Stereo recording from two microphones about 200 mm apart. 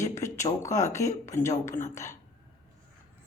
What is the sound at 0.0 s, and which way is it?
Speech, 15° left (ahead or behind).